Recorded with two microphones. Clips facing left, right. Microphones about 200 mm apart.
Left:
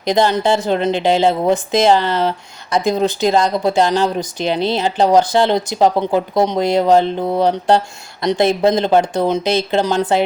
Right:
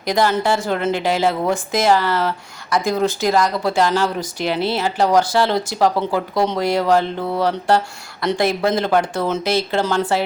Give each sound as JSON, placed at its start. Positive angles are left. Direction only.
{"t": 0.0, "sound": "speech", "side_deg": 20}